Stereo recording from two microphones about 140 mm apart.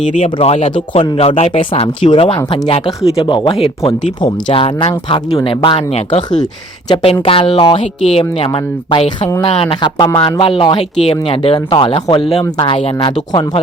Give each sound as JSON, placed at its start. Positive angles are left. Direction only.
{"t": 0.0, "sound": "speech", "side_deg": 55}
{"t": 6.4, "sound": "speech", "side_deg": 30}
{"t": 7.0, "sound": "speech", "side_deg": 40}